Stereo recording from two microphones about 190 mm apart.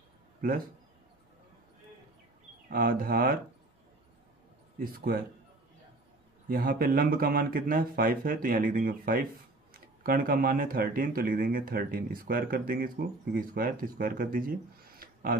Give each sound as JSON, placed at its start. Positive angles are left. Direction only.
{"t": 0.4, "sound": "speech", "side_deg": -50}
{"t": 2.7, "sound": "speech", "side_deg": -50}
{"t": 4.7, "sound": "speech", "side_deg": -50}
{"t": 6.5, "sound": "speech", "side_deg": -50}